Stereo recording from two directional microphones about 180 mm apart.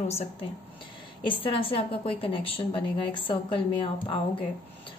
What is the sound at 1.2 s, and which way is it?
A woman's voice, 30° left (ahead or behind).